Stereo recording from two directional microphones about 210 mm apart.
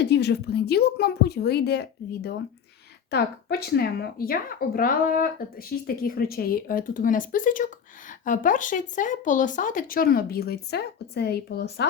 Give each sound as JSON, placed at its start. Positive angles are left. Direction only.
{"t": 0.0, "sound": "speech", "side_deg": 55}